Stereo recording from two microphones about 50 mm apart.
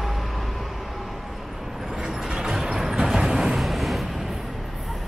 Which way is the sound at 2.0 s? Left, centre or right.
Centre.